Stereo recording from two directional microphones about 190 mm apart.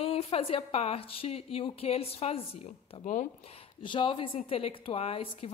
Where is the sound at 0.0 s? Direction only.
30° left (ahead or behind).